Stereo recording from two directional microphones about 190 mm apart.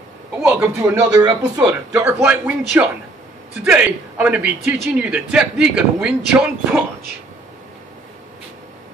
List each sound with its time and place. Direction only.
0.4 s a man's voice: 10° right (ahead or behind)
1.1 s speech: 20° right (ahead or behind); by 6.8 s 5° right (ahead or behind)